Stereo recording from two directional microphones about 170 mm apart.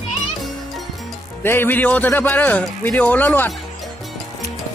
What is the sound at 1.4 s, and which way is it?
A man's voice, 15° left (ahead or behind).